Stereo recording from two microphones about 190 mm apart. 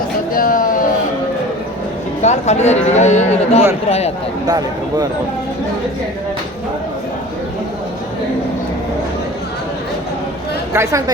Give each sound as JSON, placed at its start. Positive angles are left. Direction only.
{"t": 0.3, "sound": "a sound", "side_deg": 45}
{"t": 2.2, "sound": "speech", "side_deg": 35}
{"t": 4.4, "sound": "speech", "side_deg": -20}
{"t": 10.8, "sound": "a woman's voice", "side_deg": -15}